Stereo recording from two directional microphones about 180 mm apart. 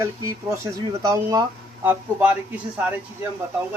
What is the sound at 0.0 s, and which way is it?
Speech, 15° right (ahead or behind).